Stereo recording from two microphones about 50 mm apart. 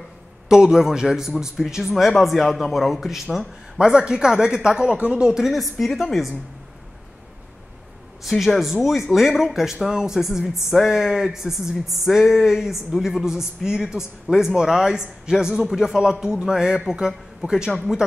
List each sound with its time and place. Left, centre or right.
0.5 s a man's voice: centre
5.3 s a man's voice: centre
8.2 s a man's voice: centre